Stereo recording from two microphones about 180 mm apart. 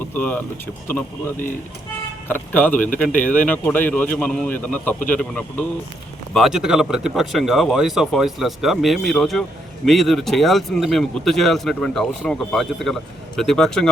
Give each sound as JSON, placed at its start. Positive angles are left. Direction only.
{"t": 0.0, "sound": "speech", "side_deg": 10}
{"t": 3.1, "sound": "speech", "side_deg": 45}
{"t": 3.3, "sound": "speech", "side_deg": 10}